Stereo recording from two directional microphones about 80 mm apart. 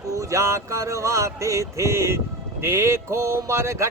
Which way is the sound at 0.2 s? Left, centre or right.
Right.